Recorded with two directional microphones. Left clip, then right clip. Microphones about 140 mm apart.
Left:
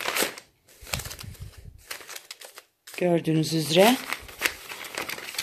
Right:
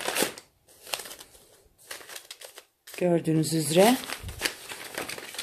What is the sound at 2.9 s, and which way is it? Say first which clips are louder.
Speech: left 1 dB; 15° left (ahead or behind).